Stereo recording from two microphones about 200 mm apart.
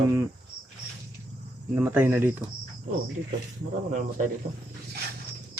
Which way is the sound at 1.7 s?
10° right (ahead or behind).